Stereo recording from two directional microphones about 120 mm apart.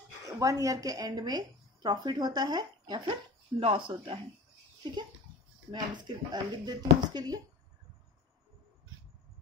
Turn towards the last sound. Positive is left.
turn(degrees=-35)  # may be behind; listen again after turning